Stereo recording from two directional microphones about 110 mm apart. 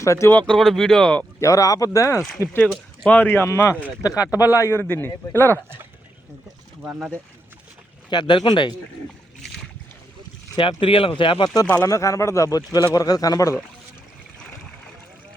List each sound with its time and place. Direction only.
0.0 s speech: 25° left (ahead or behind)
0.3 s speech: 10° left (ahead or behind)
1.4 s speech: 30° left (ahead or behind)
2.6 s speech: 10° left (ahead or behind)
8.1 s speech: 45° left (ahead or behind)
10.6 s speech: 55° left (ahead or behind)
11.6 s speech: 20° left (ahead or behind)